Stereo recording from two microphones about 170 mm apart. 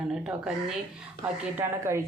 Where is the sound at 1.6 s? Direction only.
15° right (ahead or behind).